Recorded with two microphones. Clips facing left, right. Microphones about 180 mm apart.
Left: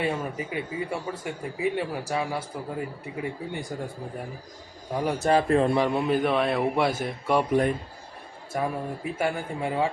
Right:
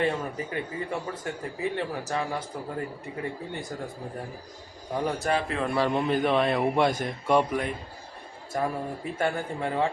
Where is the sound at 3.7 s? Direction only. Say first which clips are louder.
Left 2 dB; 10° left (ahead or behind).